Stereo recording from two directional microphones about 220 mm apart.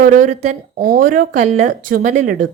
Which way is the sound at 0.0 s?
35° right (ahead or behind).